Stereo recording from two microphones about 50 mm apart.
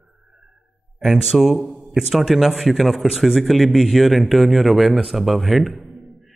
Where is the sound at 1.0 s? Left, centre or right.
Centre.